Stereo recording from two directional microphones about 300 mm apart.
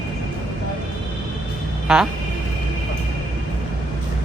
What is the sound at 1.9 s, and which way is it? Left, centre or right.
Music, centre.